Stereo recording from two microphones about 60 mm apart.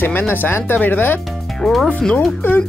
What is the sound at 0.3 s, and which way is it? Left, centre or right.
Speech, left.